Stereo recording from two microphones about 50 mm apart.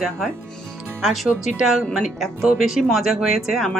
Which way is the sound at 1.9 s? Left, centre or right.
Centre.